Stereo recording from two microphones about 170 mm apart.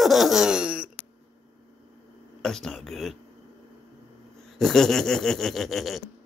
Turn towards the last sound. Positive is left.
turn(degrees=0)  # may be behind; listen again after turning